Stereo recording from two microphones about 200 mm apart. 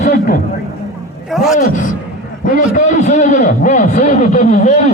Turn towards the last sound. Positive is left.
turn(degrees=40)  # may be behind; listen again after turning